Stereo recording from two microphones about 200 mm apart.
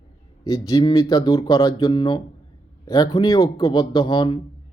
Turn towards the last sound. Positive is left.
turn(degrees=20)  # may be behind; listen again after turning